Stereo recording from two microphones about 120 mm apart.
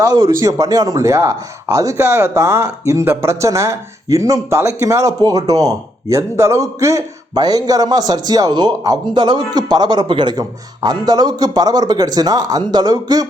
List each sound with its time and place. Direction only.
0.0 s a man's voice: 30° right (ahead or behind)